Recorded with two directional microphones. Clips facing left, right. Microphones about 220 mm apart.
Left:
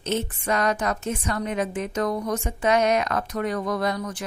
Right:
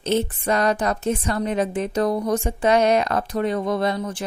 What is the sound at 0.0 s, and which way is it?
A woman's voice, 30° right (ahead or behind).